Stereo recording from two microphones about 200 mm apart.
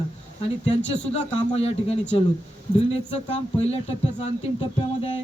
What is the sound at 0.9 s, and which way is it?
Speech, 30° left (ahead or behind).